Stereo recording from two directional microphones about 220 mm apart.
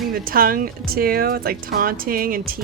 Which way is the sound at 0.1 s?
40° right (ahead or behind).